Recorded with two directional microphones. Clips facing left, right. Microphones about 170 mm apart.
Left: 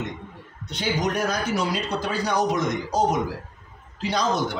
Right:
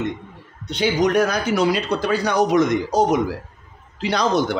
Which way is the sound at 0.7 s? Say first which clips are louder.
Right 7 dB; 70° right (ahead or behind).